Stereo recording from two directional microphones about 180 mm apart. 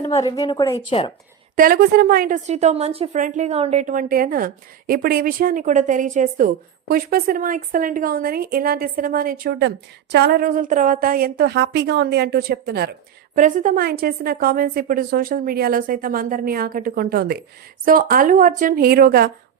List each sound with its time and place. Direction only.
0.2 s a woman's voice: 20° left (ahead or behind)
1.5 s a woman's voice: 50° right (ahead or behind)
13.3 s a woman's voice: 45° right (ahead or behind)